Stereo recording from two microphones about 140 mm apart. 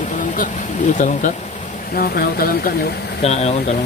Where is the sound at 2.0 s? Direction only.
90° left.